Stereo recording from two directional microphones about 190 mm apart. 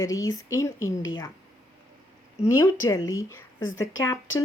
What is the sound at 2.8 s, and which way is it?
Speech, 15° left (ahead or behind).